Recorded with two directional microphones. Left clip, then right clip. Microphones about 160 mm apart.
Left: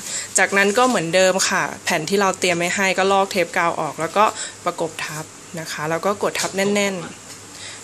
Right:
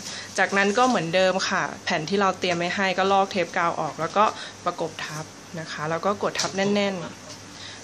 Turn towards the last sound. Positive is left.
turn(degrees=20)  # may be behind; listen again after turning